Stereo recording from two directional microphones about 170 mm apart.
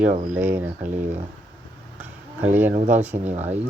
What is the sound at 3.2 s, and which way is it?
Speech, 40° right (ahead or behind).